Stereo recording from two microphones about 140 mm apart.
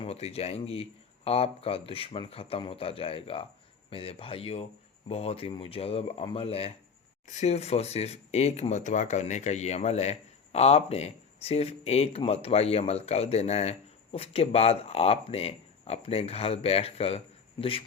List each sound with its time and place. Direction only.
0.0 s a man's voice: 45° left (ahead or behind)